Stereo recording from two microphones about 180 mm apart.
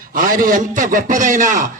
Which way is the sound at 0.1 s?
50° right (ahead or behind).